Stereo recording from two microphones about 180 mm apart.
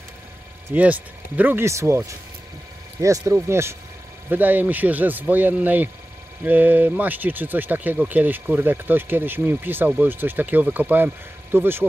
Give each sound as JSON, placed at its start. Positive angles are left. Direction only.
{"t": 0.7, "sound": "speech", "side_deg": -10}